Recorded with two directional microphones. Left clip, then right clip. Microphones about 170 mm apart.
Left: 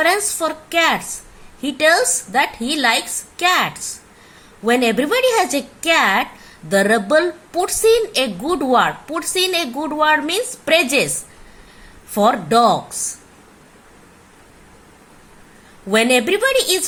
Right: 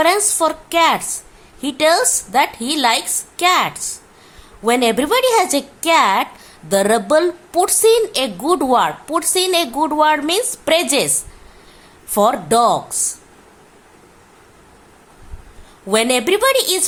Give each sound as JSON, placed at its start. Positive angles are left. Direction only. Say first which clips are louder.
{"t": 0.0, "sound": "speech", "louder": "right 2 dB", "side_deg": -20}
{"t": 12.1, "sound": "speech", "louder": "even", "side_deg": -25}
{"t": 15.9, "sound": "speech", "louder": "even", "side_deg": -25}